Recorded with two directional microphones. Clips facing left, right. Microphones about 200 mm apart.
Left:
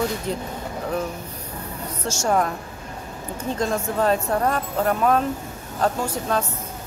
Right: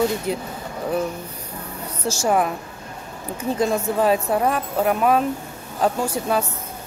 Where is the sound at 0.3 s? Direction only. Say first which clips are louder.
Right 2 dB; 10° right (ahead or behind).